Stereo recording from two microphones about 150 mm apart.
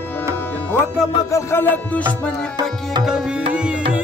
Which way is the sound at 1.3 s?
15° left (ahead or behind).